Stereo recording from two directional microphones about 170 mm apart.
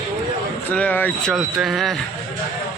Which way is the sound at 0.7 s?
10° left (ahead or behind).